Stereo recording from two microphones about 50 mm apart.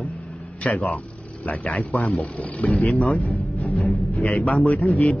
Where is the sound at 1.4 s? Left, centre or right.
Left.